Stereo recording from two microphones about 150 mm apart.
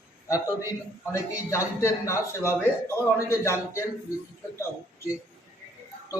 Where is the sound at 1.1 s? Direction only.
20° left (ahead or behind).